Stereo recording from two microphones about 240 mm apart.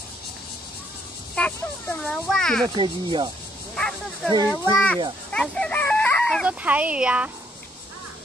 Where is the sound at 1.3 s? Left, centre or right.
Centre.